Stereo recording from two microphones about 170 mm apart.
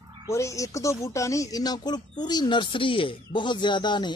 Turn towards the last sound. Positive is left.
turn(degrees=25)  # may be behind; listen again after turning